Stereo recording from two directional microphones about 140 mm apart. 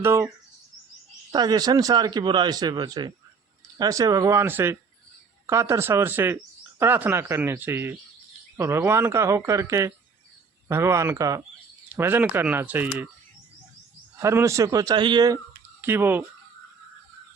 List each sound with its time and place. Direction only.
0.0 s speech: 20° right (ahead or behind)
1.3 s speech: 30° right (ahead or behind); by 13.1 s 15° right (ahead or behind)
14.2 s speech: 20° right (ahead or behind)
15.8 s speech: 15° right (ahead or behind)